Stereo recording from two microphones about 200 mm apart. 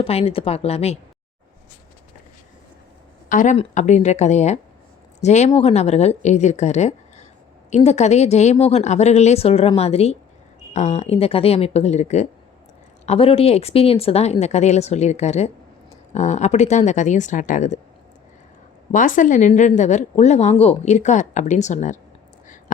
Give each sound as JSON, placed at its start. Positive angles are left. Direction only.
{"t": 0.0, "sound": "speech", "side_deg": 30}
{"t": 3.2, "sound": "speech", "side_deg": 40}
{"t": 18.9, "sound": "speech", "side_deg": 40}